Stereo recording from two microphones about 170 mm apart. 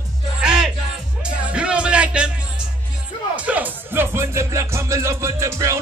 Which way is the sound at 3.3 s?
10° right (ahead or behind).